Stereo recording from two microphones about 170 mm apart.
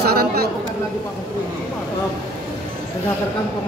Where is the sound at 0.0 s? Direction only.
65° right (ahead or behind).